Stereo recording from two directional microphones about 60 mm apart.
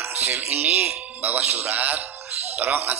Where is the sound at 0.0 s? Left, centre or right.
Right.